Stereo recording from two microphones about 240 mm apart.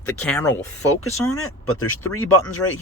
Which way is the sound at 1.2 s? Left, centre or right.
Left.